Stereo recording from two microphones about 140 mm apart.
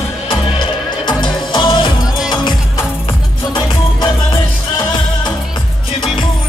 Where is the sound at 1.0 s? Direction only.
35° left (ahead or behind).